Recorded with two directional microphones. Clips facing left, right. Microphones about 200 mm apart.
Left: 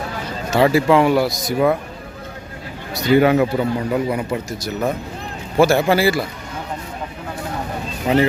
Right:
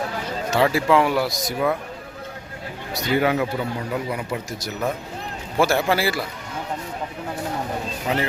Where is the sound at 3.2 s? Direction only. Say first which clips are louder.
Left 6 dB; 45° left (ahead or behind).